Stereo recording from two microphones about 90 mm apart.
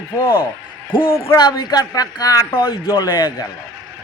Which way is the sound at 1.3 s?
50° left (ahead or behind).